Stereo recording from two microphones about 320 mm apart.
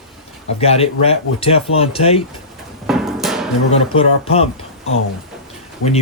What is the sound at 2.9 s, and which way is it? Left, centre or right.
Music, centre.